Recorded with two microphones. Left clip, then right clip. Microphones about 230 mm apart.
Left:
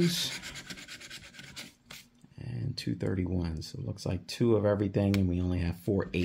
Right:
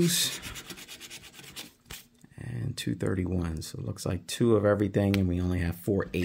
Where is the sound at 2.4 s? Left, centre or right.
Right.